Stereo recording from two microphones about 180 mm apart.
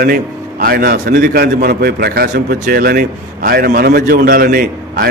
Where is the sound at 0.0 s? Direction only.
55° right (ahead or behind).